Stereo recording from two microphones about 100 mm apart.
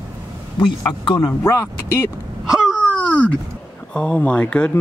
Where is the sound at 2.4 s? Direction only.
5° right (ahead or behind).